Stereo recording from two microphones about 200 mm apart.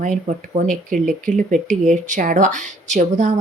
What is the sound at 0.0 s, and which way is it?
Speech, 40° right (ahead or behind).